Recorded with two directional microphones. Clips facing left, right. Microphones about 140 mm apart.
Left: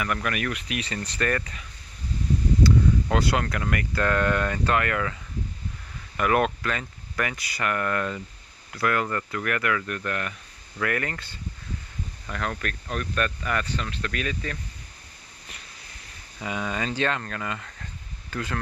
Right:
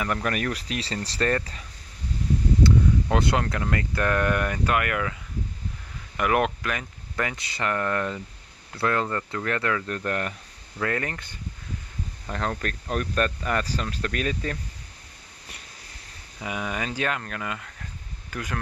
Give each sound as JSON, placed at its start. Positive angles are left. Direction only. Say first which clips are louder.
{"t": 0.0, "sound": "speech", "louder": "right 1 dB", "side_deg": -30}
{"t": 2.6, "sound": "speech", "louder": "even", "side_deg": -20}
{"t": 6.1, "sound": "speech", "louder": "even", "side_deg": -15}
{"t": 10.8, "sound": "speech", "louder": "even", "side_deg": -25}
{"t": 12.3, "sound": "speech", "louder": "right 2 dB", "side_deg": -30}
{"t": 12.9, "sound": "speech", "louder": "right 3 dB", "side_deg": -35}
{"t": 16.3, "sound": "speech", "louder": "left 1 dB", "side_deg": -15}